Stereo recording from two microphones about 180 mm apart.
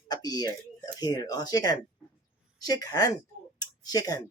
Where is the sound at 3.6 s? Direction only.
20° left (ahead or behind).